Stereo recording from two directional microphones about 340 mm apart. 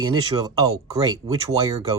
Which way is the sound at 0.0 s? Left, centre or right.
Centre.